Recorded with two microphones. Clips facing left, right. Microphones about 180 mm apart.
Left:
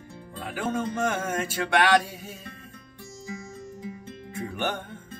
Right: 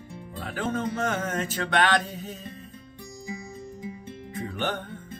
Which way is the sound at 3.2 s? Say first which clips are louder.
Right 1 dB; 15° right (ahead or behind).